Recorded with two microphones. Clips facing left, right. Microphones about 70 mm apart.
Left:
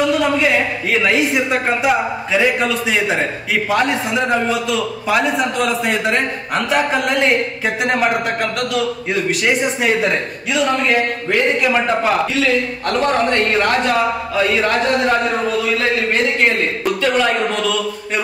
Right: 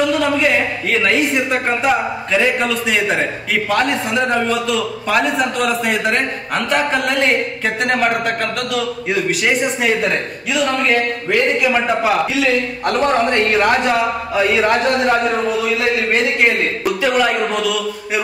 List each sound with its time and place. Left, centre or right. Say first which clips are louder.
0.0 s a man's voice: even; centre
15.0 s a man's voice: right 1 dB; centre